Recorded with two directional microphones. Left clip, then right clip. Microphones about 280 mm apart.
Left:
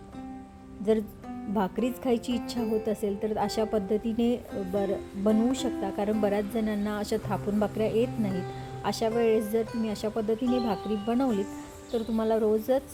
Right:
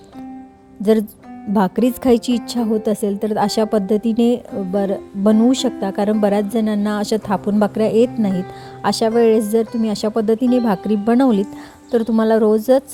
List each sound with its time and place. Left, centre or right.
1.5 s speech: right
10.4 s speech: centre
11.0 s speech: right